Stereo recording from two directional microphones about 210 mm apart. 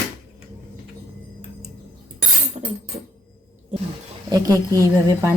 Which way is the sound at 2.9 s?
25° right (ahead or behind).